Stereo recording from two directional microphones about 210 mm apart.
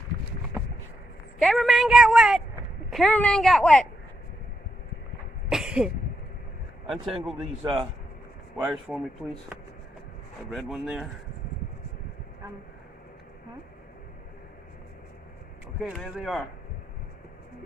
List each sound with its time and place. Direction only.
1.4 s a woman's voice: centre (ahead or behind)
5.5 s a sound: 5° right (ahead or behind)
6.8 s a woman's voice: centre (ahead or behind)
7.6 s speech: 25° right (ahead or behind)
8.5 s a woman's voice: 5° right (ahead or behind)
15.8 s a woman's voice: centre (ahead or behind)